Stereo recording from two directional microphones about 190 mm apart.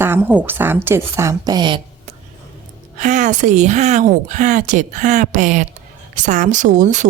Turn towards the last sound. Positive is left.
turn(degrees=-40)  # may be behind; listen again after turning